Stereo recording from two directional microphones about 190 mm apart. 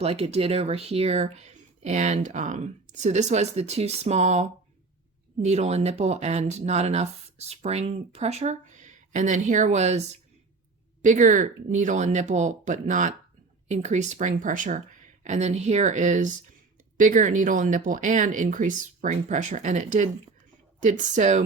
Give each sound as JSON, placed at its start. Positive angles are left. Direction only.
{"t": 0.0, "sound": "speech", "side_deg": -30}
{"t": 11.0, "sound": "speech", "side_deg": -40}